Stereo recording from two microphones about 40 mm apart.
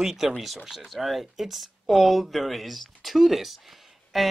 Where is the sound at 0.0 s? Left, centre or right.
Centre.